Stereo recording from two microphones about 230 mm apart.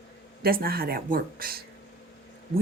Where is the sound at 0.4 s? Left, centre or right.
Right.